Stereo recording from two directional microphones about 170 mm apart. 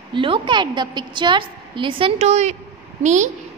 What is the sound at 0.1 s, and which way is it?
A woman's voice, 30° right (ahead or behind).